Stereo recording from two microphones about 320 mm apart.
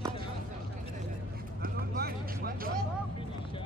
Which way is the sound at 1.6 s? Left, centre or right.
Right.